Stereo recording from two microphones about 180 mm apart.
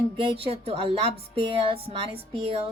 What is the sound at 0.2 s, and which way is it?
Music, 35° right (ahead or behind).